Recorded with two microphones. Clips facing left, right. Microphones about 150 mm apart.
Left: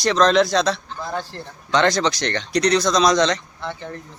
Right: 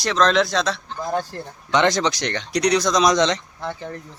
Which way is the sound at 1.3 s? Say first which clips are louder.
Even; 15° right (ahead or behind).